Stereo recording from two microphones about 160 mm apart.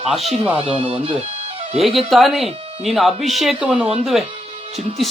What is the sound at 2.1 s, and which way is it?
Speech, centre (ahead or behind).